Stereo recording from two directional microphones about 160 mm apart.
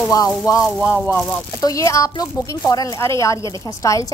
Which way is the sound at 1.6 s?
20° left (ahead or behind).